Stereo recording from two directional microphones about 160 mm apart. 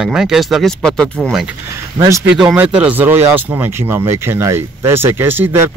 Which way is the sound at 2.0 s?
20° right (ahead or behind).